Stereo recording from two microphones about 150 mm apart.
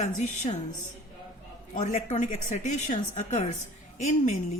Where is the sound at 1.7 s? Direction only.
50° left (ahead or behind).